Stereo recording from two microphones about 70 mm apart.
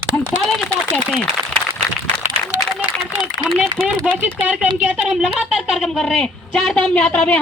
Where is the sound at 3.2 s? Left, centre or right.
Centre.